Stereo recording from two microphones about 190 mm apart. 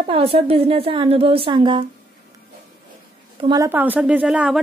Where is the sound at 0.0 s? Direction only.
30° right (ahead or behind).